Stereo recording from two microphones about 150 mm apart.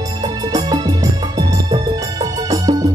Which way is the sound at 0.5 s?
25° right (ahead or behind).